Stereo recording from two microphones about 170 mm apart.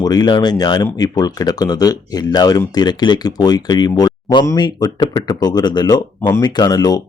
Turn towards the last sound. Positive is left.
turn(degrees=20)  # may be behind; listen again after turning